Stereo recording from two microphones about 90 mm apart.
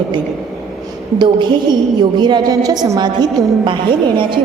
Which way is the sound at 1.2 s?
55° right (ahead or behind).